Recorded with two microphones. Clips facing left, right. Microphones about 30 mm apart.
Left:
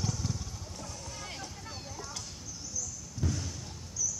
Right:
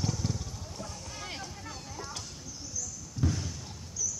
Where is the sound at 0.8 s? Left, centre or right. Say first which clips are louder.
Even; right.